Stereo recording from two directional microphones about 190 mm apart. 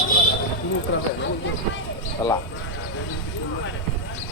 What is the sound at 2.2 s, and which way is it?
Speech, 15° left (ahead or behind).